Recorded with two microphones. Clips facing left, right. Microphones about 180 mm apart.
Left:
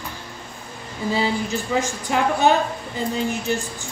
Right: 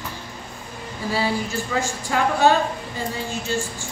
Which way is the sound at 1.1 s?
20° left (ahead or behind).